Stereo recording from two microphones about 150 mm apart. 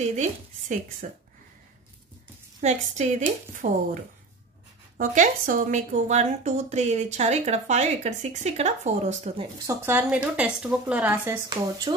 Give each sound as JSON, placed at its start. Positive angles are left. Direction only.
{"t": 0.0, "sound": "speech", "side_deg": -50}
{"t": 1.0, "sound": "speech", "side_deg": -60}
{"t": 2.6, "sound": "a woman's voice", "side_deg": -50}
{"t": 9.7, "sound": "a woman's voice", "side_deg": -15}